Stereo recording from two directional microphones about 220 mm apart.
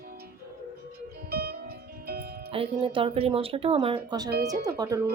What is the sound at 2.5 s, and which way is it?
Speech, 25° right (ahead or behind).